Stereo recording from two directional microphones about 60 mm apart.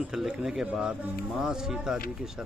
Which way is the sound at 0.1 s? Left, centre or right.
Centre.